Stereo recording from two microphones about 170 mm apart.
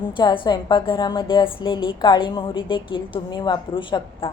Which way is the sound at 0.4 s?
25° left (ahead or behind).